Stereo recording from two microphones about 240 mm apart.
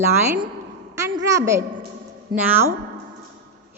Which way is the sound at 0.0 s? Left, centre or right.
Centre.